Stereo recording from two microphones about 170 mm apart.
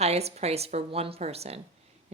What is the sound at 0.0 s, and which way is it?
A woman's voice, 40° right (ahead or behind).